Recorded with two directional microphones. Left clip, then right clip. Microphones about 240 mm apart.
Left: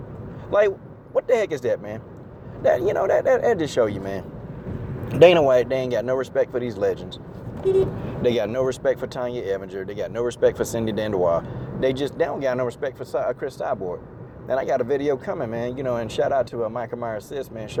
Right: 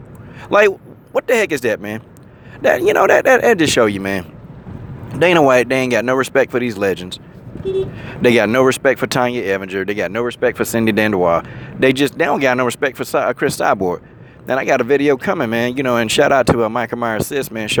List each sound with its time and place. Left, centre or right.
0.5 s speech: right
5.4 s speech: right
11.2 s speech: right
11.9 s speech: right